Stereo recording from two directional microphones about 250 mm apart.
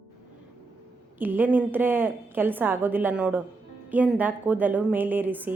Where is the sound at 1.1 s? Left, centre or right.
Centre.